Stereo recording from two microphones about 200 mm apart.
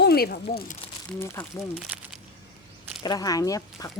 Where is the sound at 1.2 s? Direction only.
10° left (ahead or behind).